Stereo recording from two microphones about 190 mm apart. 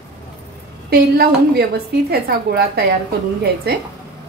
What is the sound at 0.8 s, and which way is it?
A woman's voice, 55° right (ahead or behind).